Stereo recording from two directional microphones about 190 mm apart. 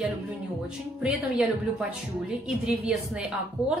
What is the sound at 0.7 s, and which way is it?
A woman's voice, 5° right (ahead or behind).